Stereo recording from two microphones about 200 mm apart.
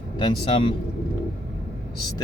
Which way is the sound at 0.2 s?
25° left (ahead or behind).